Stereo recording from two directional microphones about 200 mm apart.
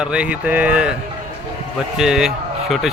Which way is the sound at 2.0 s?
5° right (ahead or behind).